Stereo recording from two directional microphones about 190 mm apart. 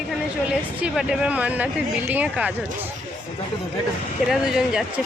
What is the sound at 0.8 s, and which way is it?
Speech, 5° right (ahead or behind).